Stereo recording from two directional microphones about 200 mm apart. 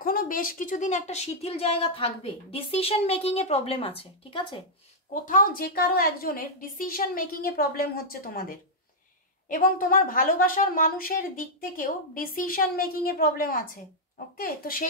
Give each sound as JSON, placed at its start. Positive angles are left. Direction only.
{"t": 0.0, "sound": "speech", "side_deg": 45}
{"t": 5.2, "sound": "a woman's voice", "side_deg": 45}